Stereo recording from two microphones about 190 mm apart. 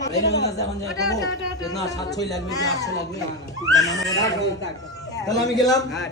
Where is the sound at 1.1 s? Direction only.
20° left (ahead or behind).